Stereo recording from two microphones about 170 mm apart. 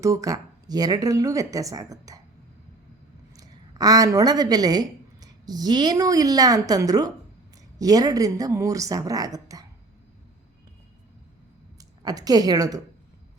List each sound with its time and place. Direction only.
0.0 s speech: 20° right (ahead or behind)
3.3 s speech: 20° right (ahead or behind)
12.0 s speech: 20° right (ahead or behind)